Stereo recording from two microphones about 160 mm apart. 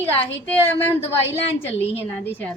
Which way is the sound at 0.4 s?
15° left (ahead or behind).